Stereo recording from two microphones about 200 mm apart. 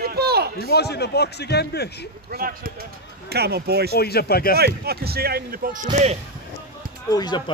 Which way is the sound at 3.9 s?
50° left (ahead or behind).